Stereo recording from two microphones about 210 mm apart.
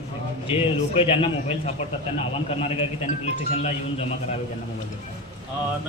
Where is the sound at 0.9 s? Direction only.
30° left (ahead or behind).